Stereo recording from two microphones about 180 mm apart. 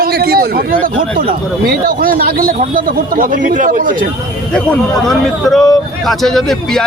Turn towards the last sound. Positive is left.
turn(degrees=0)  # may be behind; listen again after turning